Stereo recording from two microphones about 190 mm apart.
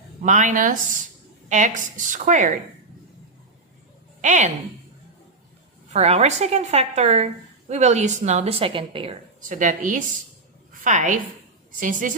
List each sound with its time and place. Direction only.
0.2 s a woman's voice: 40° right (ahead or behind)
4.2 s speech: 40° right (ahead or behind)
5.9 s a woman's voice: 35° right (ahead or behind)
9.5 s a woman's voice: 45° right (ahead or behind)